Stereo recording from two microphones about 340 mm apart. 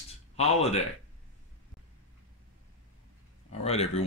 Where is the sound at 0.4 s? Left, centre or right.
Centre.